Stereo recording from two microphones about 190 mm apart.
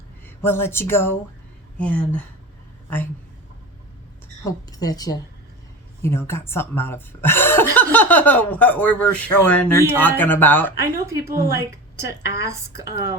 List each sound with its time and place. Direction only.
0.3 s speech: 10° left (ahead or behind)
4.4 s a woman's voice: 20° left (ahead or behind)
10.8 s a woman's voice: 15° right (ahead or behind)